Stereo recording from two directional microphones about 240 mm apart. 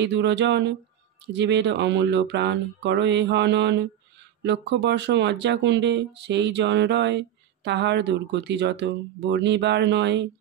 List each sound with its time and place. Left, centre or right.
0.0 s speech: right